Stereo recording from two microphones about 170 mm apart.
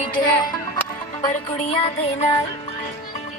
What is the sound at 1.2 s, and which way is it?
Music, 35° left (ahead or behind).